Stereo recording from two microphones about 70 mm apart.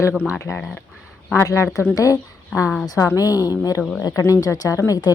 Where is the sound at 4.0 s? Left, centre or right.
Left.